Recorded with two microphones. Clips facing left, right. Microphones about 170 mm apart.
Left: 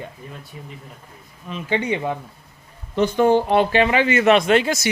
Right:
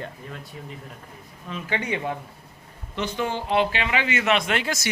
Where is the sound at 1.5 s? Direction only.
25° left (ahead or behind).